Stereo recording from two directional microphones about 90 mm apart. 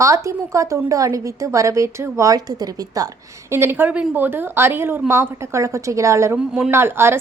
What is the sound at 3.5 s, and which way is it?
A woman's voice, 25° right (ahead or behind).